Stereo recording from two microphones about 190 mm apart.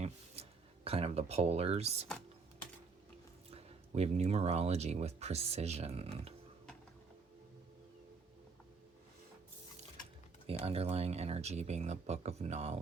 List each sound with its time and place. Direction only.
0.4 s a sound: 30° right (ahead or behind)
0.9 s speech: 30° right (ahead or behind)
3.5 s speech: 35° right (ahead or behind)
10.4 s speech: 30° right (ahead or behind)